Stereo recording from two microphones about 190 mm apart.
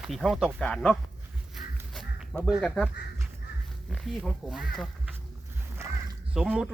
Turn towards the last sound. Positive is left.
turn(degrees=-5)  # may be behind; listen again after turning